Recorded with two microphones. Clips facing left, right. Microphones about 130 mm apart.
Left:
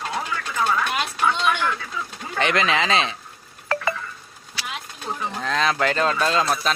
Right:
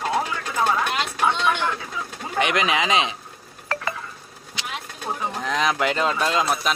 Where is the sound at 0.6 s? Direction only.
25° right (ahead or behind).